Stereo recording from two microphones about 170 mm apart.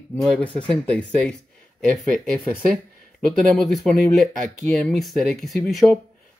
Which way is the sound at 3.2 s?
Centre (ahead or behind).